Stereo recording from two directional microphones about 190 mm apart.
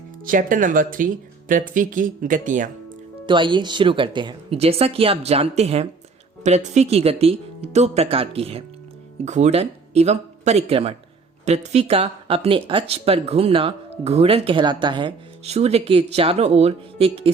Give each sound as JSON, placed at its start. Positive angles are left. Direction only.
{"t": 0.3, "sound": "speech", "side_deg": -45}
{"t": 3.2, "sound": "speech", "side_deg": -25}